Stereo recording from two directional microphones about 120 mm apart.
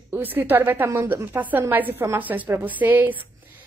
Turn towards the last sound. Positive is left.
turn(degrees=-15)  # may be behind; listen again after turning